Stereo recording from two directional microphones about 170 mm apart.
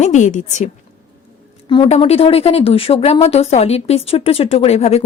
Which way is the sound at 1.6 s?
30° left (ahead or behind).